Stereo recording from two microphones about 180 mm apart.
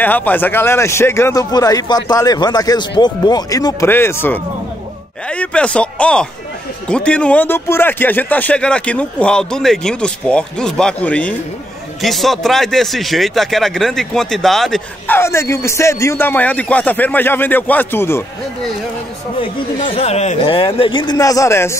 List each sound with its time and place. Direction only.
0.0 s a man's voice: 10° left (ahead or behind)
15.1 s speech: 15° left (ahead or behind)
19.8 s a man's voice: 35° left (ahead or behind); by 21.7 s 15° left (ahead or behind)